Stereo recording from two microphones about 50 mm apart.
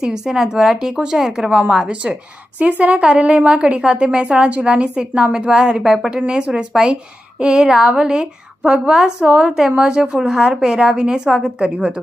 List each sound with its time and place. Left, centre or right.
0.0 s a woman's voice: centre